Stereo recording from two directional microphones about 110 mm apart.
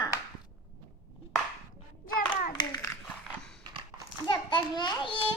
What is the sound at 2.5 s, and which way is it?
Hands, 40° left (ahead or behind).